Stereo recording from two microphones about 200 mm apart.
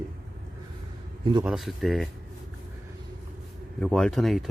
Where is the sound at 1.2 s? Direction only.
20° right (ahead or behind).